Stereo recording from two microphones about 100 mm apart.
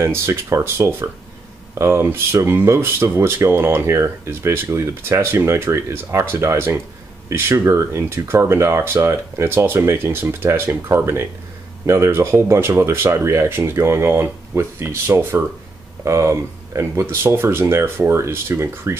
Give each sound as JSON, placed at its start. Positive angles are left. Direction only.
{"t": 0.0, "sound": "speech", "side_deg": -30}